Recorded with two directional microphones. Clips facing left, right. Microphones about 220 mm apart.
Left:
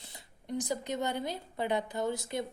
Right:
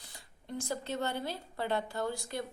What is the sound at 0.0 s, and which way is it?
A woman's voice, 20° left (ahead or behind).